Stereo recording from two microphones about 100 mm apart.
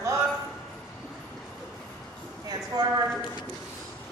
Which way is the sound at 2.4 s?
40° right (ahead or behind).